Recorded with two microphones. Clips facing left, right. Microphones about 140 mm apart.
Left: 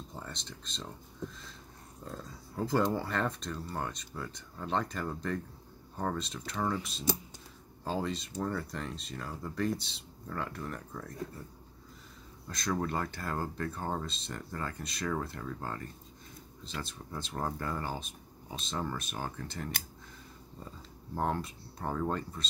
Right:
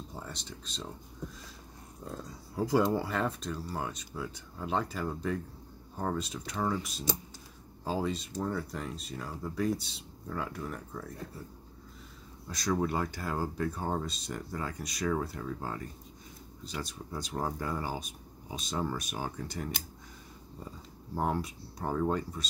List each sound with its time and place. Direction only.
0.1 s speech: 5° right (ahead or behind)
2.0 s speech: 10° right (ahead or behind)
12.4 s speech: 5° right (ahead or behind)
21.1 s speech: 10° right (ahead or behind)